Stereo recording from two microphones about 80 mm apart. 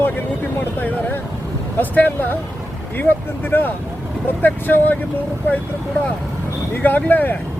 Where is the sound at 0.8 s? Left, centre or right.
Left.